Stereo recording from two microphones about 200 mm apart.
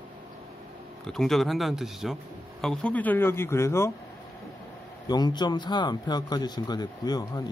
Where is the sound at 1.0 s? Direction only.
Centre (ahead or behind).